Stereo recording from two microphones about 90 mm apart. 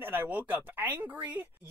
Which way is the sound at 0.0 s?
20° right (ahead or behind).